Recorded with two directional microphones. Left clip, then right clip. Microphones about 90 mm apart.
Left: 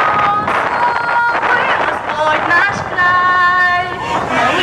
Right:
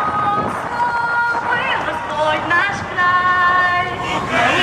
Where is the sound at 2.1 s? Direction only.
35° left (ahead or behind).